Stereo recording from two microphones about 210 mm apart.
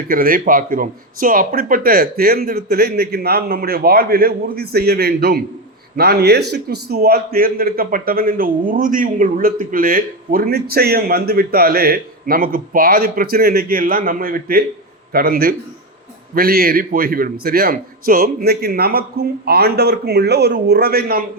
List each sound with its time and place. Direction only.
0.1 s a man's voice: 45° right (ahead or behind)